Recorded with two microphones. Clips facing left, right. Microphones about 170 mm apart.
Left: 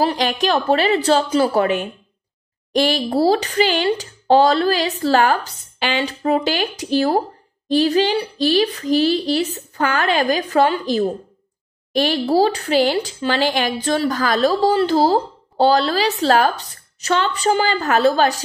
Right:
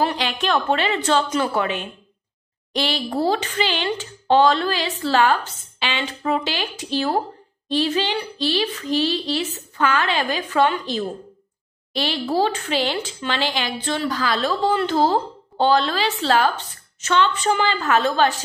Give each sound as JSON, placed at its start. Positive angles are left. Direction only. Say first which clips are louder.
{"t": 0.0, "sound": "speech", "louder": "left 4 dB", "side_deg": 35}